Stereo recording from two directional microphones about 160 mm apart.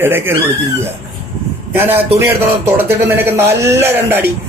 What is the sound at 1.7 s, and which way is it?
A man's voice, 15° right (ahead or behind).